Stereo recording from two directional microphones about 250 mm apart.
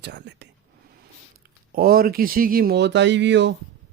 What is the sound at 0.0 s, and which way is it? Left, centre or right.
Speech, right.